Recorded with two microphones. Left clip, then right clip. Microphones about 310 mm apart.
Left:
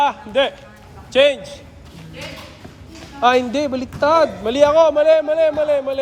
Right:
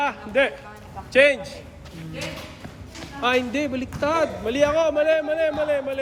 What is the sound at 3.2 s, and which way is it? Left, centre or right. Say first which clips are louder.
A man's voice: left 7 dB; centre.